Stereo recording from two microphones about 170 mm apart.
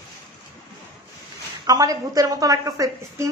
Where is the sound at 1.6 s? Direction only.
20° right (ahead or behind).